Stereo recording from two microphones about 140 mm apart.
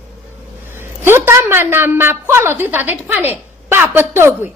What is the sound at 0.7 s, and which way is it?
A woman's voice, 15° right (ahead or behind).